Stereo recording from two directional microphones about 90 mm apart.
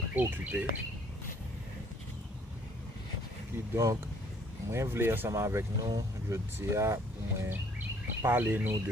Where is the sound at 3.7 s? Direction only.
35° right (ahead or behind).